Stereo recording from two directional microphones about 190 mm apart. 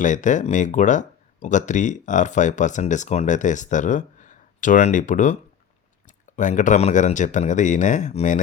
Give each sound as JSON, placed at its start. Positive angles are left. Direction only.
{"t": 0.0, "sound": "speech", "side_deg": 40}